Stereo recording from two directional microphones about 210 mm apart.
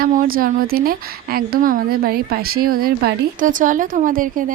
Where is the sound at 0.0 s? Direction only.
40° right (ahead or behind).